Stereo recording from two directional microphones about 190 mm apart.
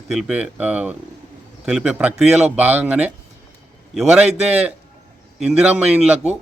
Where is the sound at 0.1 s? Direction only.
5° right (ahead or behind).